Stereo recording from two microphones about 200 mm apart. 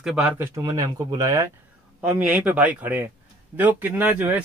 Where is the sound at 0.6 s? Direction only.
15° right (ahead or behind).